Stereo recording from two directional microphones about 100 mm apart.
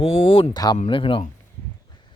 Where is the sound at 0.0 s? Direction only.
70° left (ahead or behind).